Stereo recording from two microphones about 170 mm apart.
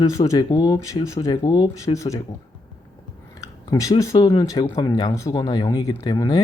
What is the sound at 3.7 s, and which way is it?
Speech, 20° left (ahead or behind).